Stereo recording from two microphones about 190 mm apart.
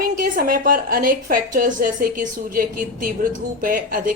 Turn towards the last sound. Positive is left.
turn(degrees=-45)  # may be behind; listen again after turning